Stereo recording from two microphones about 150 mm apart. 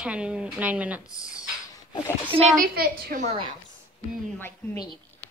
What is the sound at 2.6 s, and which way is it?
Speech, 85° right.